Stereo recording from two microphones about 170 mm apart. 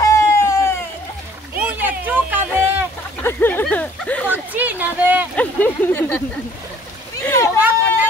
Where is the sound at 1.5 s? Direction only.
10° right (ahead or behind).